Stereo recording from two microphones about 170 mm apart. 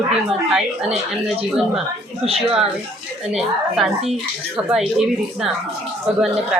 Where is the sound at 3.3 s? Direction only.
5° right (ahead or behind).